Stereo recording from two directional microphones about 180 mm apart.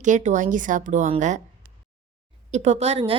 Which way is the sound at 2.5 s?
40° right (ahead or behind).